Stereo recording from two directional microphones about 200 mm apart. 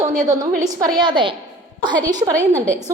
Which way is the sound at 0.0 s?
35° right (ahead or behind).